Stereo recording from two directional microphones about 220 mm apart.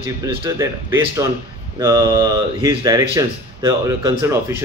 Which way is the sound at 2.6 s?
15° right (ahead or behind).